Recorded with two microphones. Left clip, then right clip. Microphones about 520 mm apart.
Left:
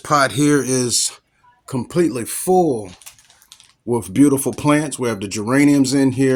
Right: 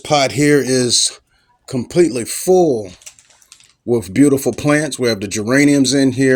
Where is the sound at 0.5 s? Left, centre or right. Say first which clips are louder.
Right 4 dB; left.